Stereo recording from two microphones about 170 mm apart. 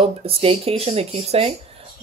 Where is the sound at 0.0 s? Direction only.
35° right (ahead or behind).